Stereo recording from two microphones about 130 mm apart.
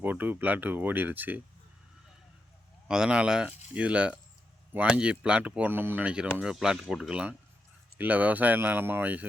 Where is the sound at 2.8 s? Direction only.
5° right (ahead or behind).